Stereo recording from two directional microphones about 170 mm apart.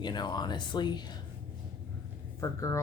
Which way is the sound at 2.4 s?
20° left (ahead or behind).